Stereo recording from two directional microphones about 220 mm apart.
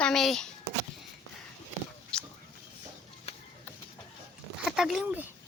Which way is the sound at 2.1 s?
5° left (ahead or behind).